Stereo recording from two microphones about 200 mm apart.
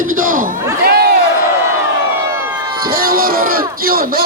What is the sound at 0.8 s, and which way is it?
Crowd, 50° right (ahead or behind).